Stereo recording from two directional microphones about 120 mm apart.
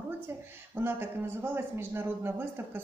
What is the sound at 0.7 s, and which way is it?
Speech, 20° right (ahead or behind).